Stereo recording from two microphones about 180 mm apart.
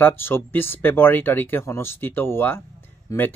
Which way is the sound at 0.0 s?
10° left (ahead or behind).